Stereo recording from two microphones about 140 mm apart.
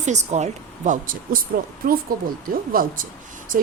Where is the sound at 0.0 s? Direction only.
55° right (ahead or behind).